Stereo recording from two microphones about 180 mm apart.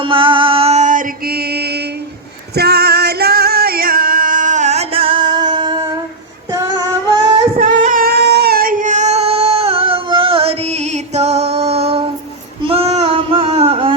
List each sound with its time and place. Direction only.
0.0 s mantra: 30° right (ahead or behind); by 1.8 s 65° right (ahead or behind)
2.6 s music: 65° right (ahead or behind); by 6.0 s 25° right (ahead or behind)
6.5 s child singing: 20° right (ahead or behind)
7.6 s singing: 45° right (ahead or behind)
12.6 s a sound: 35° right (ahead or behind)